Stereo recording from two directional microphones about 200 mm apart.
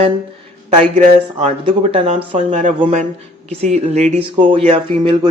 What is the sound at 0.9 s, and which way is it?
Speech, 35° right (ahead or behind).